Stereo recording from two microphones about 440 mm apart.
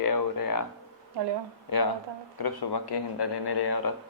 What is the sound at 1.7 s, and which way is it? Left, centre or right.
Speech, left.